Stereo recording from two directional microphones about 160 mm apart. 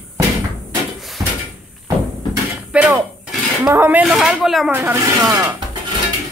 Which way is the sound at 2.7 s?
10° right (ahead or behind).